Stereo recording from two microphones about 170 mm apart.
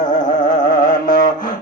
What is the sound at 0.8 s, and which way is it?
Carnatic music, 50° left (ahead or behind).